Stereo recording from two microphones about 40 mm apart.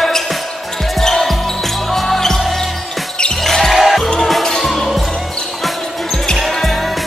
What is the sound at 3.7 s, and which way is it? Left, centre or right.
Music, centre.